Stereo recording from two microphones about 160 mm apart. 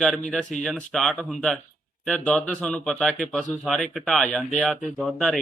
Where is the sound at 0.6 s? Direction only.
5° left (ahead or behind).